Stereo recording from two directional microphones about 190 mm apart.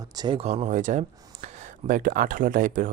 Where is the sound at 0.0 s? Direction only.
20° right (ahead or behind).